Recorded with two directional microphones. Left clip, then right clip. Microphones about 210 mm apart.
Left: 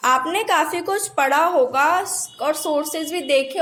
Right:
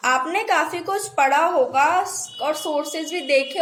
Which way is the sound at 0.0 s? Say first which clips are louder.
Left 2 dB; 35° left (ahead or behind).